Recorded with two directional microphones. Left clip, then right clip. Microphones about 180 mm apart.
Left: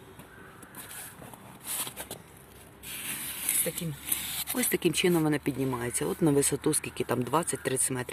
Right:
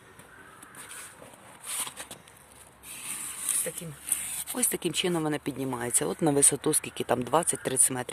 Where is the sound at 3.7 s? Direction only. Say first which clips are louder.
Left 2 dB; centre (ahead or behind).